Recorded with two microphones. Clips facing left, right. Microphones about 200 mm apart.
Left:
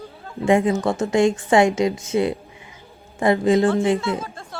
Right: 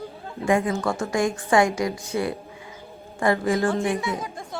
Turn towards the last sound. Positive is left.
turn(degrees=-15)  # may be behind; listen again after turning